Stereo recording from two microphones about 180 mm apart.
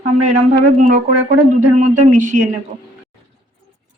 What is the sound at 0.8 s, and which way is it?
Speech, 45° right (ahead or behind).